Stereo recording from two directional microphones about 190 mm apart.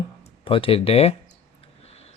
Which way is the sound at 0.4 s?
30° left (ahead or behind).